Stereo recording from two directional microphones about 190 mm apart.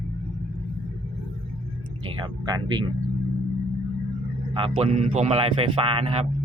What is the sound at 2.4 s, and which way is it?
Speech, 20° right (ahead or behind).